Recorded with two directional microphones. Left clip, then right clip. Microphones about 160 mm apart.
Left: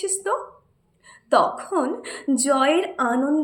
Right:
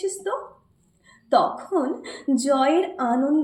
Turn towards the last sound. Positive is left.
turn(degrees=20)  # may be behind; listen again after turning